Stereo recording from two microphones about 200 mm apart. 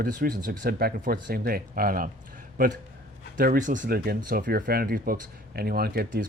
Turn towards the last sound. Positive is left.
turn(degrees=-50)  # may be behind; listen again after turning